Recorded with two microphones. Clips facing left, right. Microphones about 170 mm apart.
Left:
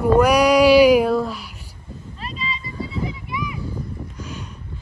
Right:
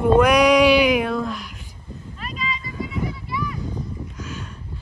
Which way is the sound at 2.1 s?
30° left (ahead or behind).